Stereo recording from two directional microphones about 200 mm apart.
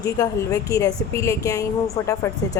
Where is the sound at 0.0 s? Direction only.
15° left (ahead or behind).